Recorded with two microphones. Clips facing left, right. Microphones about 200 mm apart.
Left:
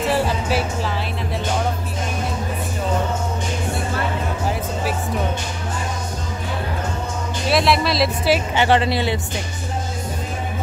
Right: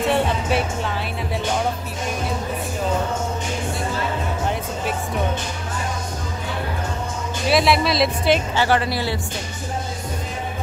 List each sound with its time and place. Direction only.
0.0 s music: centre (ahead or behind)
7.4 s speech: centre (ahead or behind)
8.5 s speech: 20° left (ahead or behind)